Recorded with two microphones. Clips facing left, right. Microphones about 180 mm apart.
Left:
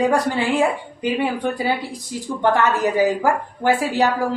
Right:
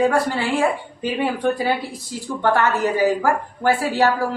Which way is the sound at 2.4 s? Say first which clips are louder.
Left 1 dB; 20° left (ahead or behind).